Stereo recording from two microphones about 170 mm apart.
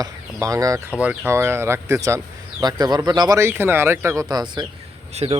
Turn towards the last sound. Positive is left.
turn(degrees=-35)  # may be behind; listen again after turning